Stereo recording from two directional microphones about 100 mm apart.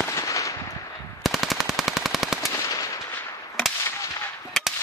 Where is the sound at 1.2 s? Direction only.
Centre (ahead or behind).